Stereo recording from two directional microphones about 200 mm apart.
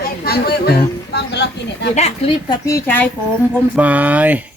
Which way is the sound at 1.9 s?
35° left (ahead or behind).